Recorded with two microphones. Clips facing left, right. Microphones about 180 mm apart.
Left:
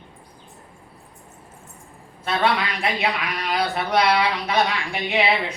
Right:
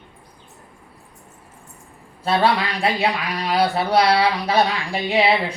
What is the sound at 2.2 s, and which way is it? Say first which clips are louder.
Speech: right 3 dB; 35° right (ahead or behind).